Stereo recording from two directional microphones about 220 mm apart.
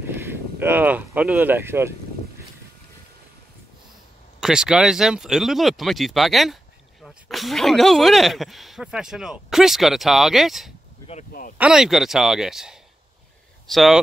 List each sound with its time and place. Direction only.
0.0 s speech: 10° right (ahead or behind)
4.4 s speech: 5° right (ahead or behind)
11.1 s speech: 35° left (ahead or behind)
11.5 s speech: 5° right (ahead or behind)